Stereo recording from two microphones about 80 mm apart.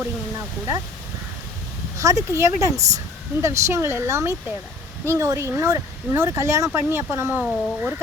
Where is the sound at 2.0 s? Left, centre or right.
Right.